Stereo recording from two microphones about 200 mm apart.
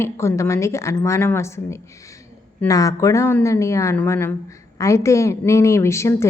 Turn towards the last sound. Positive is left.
turn(degrees=15)  # may be behind; listen again after turning